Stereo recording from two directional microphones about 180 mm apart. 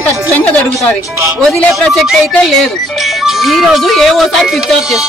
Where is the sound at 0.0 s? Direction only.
15° right (ahead or behind).